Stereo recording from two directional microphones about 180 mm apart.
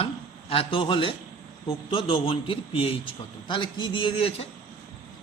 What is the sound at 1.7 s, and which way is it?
A man's voice, 30° left (ahead or behind).